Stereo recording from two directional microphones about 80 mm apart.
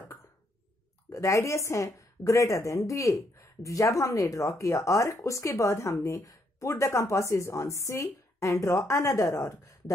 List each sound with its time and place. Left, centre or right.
1.1 s speech: left